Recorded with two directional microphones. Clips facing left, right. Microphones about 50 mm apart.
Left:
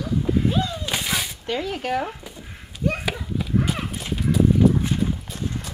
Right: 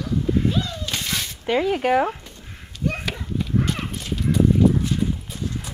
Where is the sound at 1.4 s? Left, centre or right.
Centre.